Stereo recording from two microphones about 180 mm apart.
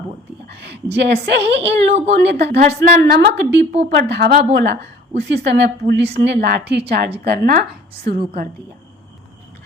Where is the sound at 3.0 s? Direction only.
70° right (ahead or behind).